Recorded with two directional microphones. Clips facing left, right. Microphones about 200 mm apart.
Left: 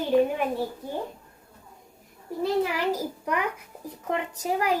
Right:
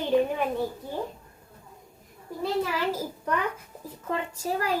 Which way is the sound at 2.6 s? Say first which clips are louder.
Left 2 dB; 15° left (ahead or behind).